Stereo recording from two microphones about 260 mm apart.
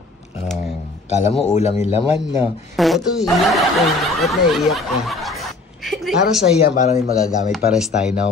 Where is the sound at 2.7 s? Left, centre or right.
Centre.